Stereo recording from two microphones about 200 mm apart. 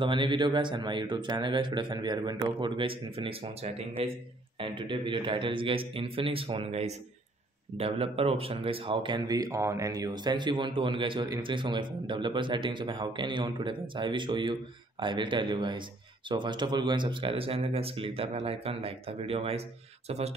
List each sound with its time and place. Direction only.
0.0 s speech: 25° right (ahead or behind)